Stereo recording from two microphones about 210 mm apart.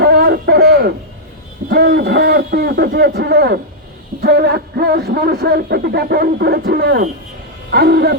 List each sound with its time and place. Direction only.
0.0 s hoot: 50° right (ahead or behind)
1.7 s a man's voice: 45° right (ahead or behind)